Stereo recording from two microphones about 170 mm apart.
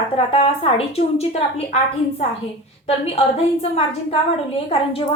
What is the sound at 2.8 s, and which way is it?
A woman's voice, 35° left (ahead or behind).